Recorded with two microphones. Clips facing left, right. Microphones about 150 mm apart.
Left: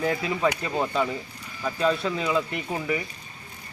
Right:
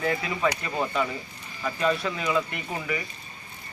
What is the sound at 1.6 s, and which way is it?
Speech, centre (ahead or behind).